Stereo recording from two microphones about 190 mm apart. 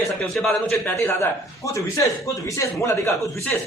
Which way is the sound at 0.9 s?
15° left (ahead or behind).